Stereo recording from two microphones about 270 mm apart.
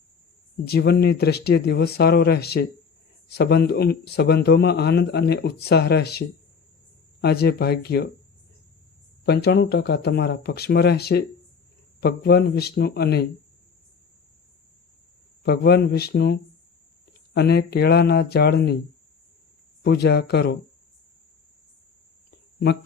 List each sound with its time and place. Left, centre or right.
0.6 s speech: left
9.2 s speech: left
15.4 s speech: left
19.8 s speech: left